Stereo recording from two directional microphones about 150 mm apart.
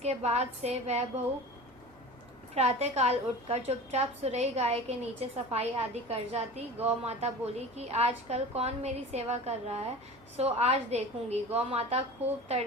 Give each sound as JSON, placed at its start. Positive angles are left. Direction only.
{"t": 0.0, "sound": "a woman's voice", "side_deg": -45}
{"t": 2.6, "sound": "a woman's voice", "side_deg": -45}